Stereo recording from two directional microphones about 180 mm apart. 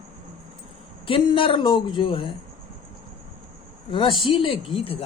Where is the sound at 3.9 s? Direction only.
30° left (ahead or behind).